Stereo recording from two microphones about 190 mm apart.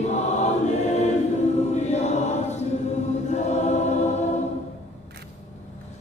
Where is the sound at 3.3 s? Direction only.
35° left (ahead or behind).